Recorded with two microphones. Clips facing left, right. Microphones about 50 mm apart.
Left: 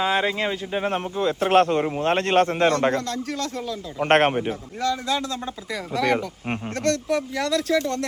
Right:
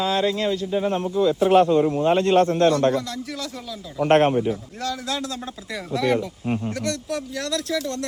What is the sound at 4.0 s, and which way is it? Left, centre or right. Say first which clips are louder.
Speech: right 2 dB; left.